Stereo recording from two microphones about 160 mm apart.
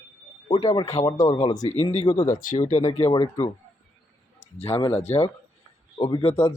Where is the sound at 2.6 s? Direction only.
50° left (ahead or behind).